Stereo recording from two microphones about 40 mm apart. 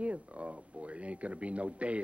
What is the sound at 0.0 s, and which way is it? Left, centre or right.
Speech, right.